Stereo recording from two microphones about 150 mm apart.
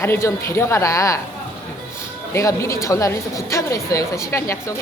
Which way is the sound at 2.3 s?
20° left (ahead or behind).